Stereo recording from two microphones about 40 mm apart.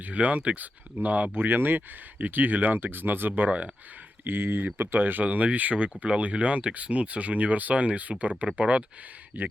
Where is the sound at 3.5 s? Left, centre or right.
Right.